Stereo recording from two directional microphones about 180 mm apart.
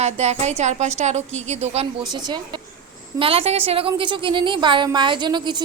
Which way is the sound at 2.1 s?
20° right (ahead or behind).